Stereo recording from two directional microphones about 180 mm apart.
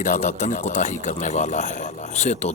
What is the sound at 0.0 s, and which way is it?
Speech, 40° left (ahead or behind).